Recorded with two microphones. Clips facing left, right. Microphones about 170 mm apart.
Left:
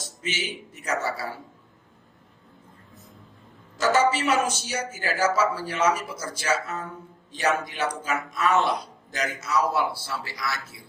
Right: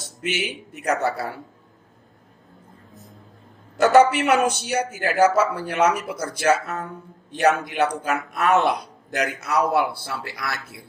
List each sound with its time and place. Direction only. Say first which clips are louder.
0.0 s a woman's voice: right 5 dB; 60° right (ahead or behind)
3.8 s a woman's voice: right 6 dB; 60° right (ahead or behind)